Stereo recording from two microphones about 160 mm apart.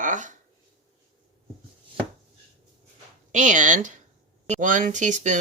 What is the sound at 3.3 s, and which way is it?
Speech, 50° right (ahead or behind).